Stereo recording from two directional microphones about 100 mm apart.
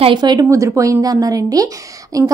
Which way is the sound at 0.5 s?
30° right (ahead or behind).